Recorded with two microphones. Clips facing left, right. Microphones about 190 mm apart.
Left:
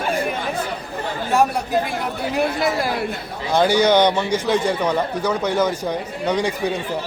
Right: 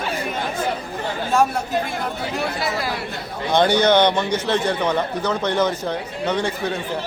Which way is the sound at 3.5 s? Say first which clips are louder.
Even; 5° left (ahead or behind).